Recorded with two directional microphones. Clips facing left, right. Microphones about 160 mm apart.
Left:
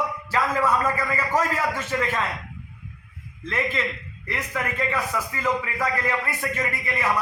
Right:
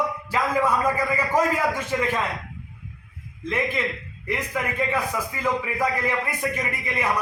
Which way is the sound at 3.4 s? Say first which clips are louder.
Right 1 dB; 15° right (ahead or behind).